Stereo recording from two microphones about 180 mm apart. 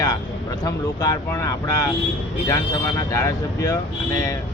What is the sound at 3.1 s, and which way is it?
Speech, 15° left (ahead or behind).